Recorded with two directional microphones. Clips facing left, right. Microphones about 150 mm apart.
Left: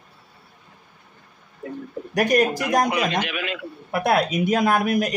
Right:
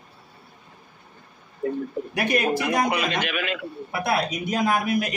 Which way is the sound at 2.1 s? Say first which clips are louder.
Left 4 dB; 40° left (ahead or behind).